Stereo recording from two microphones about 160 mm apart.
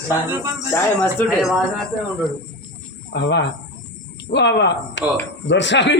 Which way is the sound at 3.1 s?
90° left.